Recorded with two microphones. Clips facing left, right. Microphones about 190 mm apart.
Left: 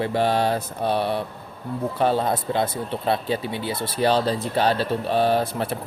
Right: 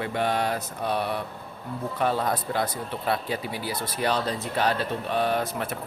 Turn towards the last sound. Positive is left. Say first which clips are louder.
# left 5 dB
turn(degrees=30)  # may be behind; listen again after turning